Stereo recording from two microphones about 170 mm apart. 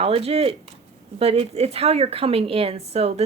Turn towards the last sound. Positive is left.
turn(degrees=-35)  # may be behind; listen again after turning